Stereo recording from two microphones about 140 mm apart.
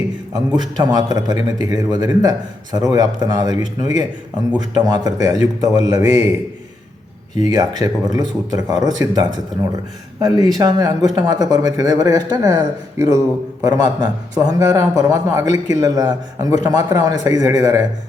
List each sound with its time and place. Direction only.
0.3 s speech: 30° right (ahead or behind)
4.5 s speech: 30° right (ahead or behind)
7.4 s speech: 25° right (ahead or behind)
10.2 s speech: 25° right (ahead or behind)